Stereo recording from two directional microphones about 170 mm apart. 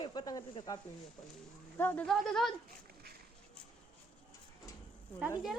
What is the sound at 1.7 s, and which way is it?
Speech, 10° left (ahead or behind).